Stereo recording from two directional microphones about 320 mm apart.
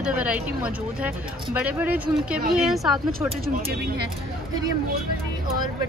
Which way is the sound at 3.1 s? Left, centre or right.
Right.